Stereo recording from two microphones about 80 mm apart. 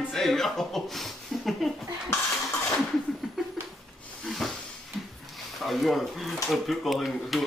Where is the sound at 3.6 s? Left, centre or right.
Centre.